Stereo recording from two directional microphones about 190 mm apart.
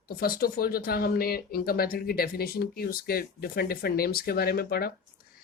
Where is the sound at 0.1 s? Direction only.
50° left (ahead or behind).